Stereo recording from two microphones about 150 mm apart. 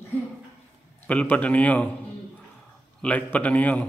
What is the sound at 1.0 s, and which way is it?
Speech, 10° left (ahead or behind).